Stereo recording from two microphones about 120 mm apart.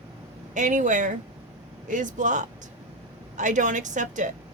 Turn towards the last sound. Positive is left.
turn(degrees=-90)